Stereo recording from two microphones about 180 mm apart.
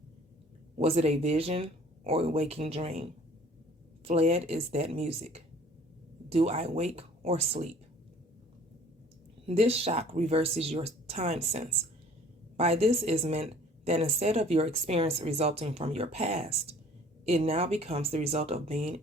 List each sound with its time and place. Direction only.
0.8 s a woman's voice: 35° right (ahead or behind)
9.5 s a woman's voice: 35° right (ahead or behind)